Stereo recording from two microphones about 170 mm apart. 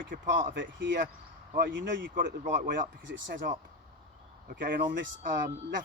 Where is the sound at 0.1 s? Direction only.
55° right (ahead or behind).